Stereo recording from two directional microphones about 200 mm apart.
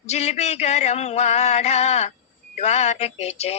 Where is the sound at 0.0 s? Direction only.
35° left (ahead or behind).